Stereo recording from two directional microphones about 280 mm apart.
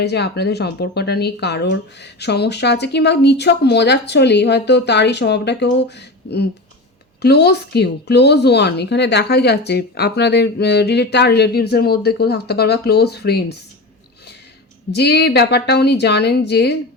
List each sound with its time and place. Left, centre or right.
0.0 s speech: left
14.9 s speech: left